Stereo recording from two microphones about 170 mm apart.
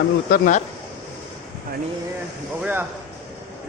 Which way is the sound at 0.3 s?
55° left (ahead or behind).